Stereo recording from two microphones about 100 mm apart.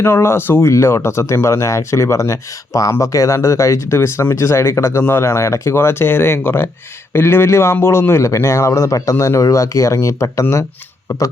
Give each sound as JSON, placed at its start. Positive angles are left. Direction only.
{"t": 0.0, "sound": "speech", "side_deg": 25}